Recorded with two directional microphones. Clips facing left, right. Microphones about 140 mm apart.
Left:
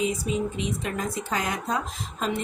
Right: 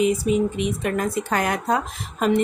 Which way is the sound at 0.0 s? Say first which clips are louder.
Right 7 dB; 65° right (ahead or behind).